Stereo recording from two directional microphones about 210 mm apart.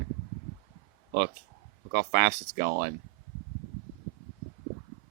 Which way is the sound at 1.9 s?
50° right (ahead or behind).